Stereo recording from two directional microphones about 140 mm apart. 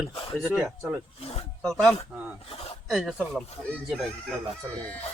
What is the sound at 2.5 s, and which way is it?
Speech, 45° left (ahead or behind).